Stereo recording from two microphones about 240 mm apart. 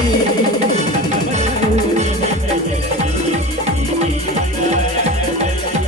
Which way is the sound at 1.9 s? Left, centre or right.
Right.